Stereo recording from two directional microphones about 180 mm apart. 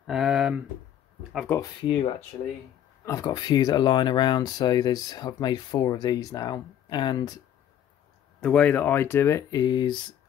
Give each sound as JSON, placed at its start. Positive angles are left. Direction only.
{"t": 0.0, "sound": "a sound", "side_deg": 0}
{"t": 1.8, "sound": "speech", "side_deg": 30}
{"t": 3.1, "sound": "speech", "side_deg": 20}
{"t": 8.4, "sound": "speech", "side_deg": 5}